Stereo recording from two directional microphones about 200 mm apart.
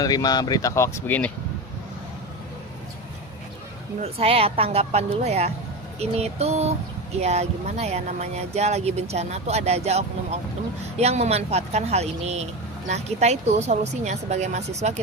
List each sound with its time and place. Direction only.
0.0 s speech: 20° left (ahead or behind)
4.0 s speech: 30° right (ahead or behind)